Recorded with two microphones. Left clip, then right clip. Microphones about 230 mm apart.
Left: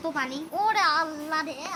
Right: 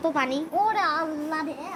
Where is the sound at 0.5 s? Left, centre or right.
Left.